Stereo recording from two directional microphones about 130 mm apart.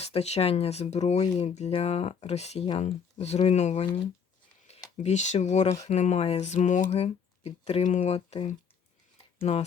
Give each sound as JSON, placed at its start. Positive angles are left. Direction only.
{"t": 0.0, "sound": "speech", "side_deg": 50}
{"t": 4.9, "sound": "speech", "side_deg": 65}
{"t": 6.9, "sound": "speech", "side_deg": 55}